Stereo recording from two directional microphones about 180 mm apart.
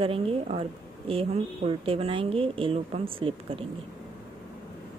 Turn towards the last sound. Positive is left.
turn(degrees=-30)  # may be behind; listen again after turning